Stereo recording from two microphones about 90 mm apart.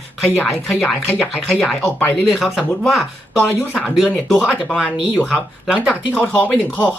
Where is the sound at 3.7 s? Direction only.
Centre (ahead or behind).